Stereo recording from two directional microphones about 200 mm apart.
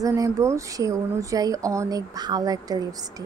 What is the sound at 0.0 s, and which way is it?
Speech, 15° right (ahead or behind).